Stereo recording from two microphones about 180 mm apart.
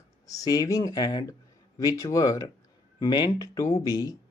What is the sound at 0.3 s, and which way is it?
Speech, 20° left (ahead or behind).